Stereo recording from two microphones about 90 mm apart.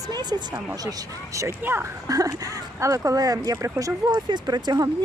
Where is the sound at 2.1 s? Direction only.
40° right (ahead or behind).